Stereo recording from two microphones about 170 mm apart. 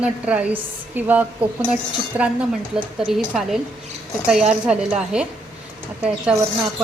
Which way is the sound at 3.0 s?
Centre (ahead or behind).